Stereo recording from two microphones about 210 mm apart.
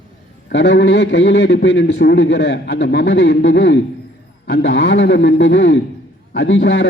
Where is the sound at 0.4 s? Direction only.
55° left (ahead or behind).